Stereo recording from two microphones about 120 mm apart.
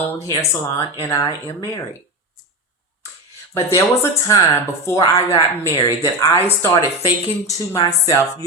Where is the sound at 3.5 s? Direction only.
20° left (ahead or behind).